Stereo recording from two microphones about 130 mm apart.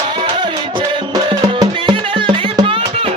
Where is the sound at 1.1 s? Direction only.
35° right (ahead or behind).